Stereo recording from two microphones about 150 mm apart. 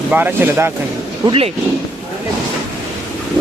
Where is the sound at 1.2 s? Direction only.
35° right (ahead or behind).